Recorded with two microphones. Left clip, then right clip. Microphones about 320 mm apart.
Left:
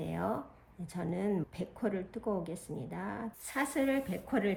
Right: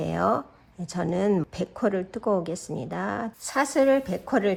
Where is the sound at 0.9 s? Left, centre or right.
Right.